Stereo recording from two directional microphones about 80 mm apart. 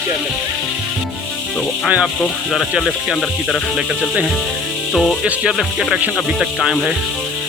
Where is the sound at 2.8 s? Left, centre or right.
Centre.